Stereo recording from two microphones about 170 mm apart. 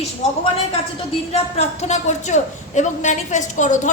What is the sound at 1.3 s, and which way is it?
A woman's voice, 40° left (ahead or behind).